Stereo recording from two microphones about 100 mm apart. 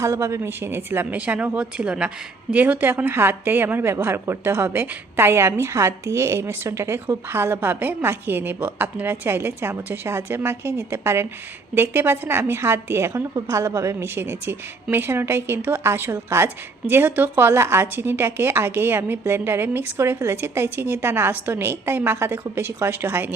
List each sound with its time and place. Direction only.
0.0 s a woman's voice: 30° right (ahead or behind)